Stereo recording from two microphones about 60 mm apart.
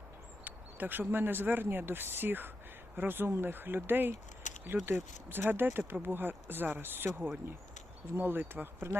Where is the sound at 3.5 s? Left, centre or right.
Right.